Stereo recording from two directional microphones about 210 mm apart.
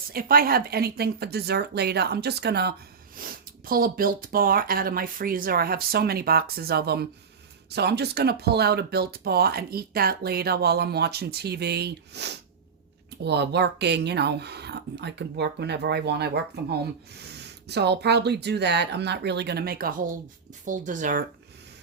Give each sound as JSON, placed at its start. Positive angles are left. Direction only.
{"t": 0.1, "sound": "speech", "side_deg": -45}